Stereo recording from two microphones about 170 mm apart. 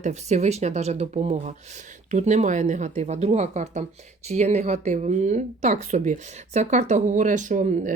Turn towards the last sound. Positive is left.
turn(degrees=-45)  # may be behind; listen again after turning